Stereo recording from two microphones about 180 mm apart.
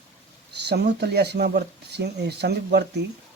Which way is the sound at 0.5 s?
65° right (ahead or behind).